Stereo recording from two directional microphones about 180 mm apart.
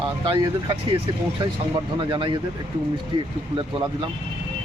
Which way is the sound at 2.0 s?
25° right (ahead or behind).